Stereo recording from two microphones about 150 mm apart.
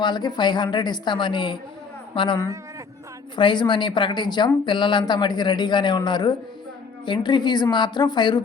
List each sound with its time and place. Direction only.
0.0 s a woman's voice: 30° left (ahead or behind)